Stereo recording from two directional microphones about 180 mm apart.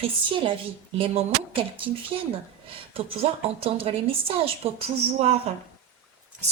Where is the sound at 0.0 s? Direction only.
30° right (ahead or behind).